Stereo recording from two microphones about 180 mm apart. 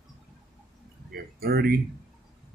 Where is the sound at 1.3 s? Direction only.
60° right (ahead or behind).